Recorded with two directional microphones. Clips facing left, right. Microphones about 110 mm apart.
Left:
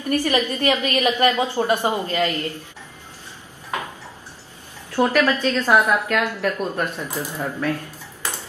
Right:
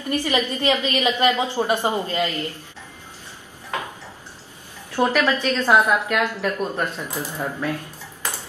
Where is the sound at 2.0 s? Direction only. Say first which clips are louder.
Left 2 dB; 15° right (ahead or behind).